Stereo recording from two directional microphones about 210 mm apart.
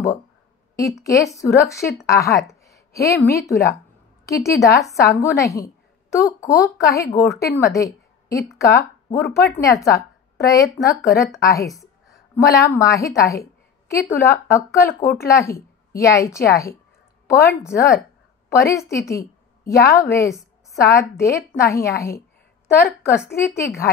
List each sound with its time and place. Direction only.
1.0 s a woman's voice: 15° left (ahead or behind)